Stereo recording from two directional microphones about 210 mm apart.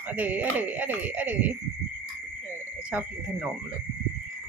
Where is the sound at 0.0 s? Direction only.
10° right (ahead or behind).